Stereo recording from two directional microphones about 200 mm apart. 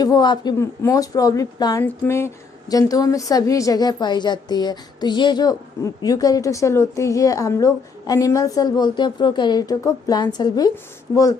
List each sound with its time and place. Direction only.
0.0 s a woman's voice: 20° left (ahead or behind)